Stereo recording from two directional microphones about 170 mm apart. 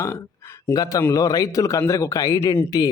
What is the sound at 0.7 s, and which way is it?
A man's voice, 20° left (ahead or behind).